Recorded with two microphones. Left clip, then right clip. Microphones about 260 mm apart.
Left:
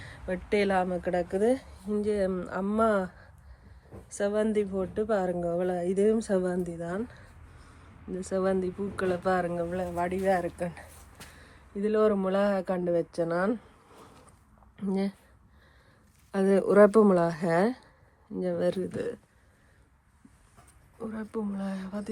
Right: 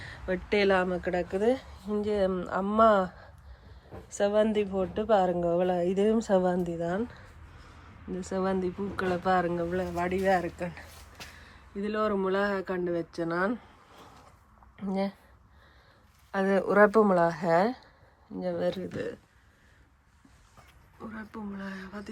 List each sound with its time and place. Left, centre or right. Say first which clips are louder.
0.0 s speech: right 2 dB; centre
14.8 s speech: even; centre
16.3 s speech: left 2 dB; centre
21.0 s speech: left 6 dB; centre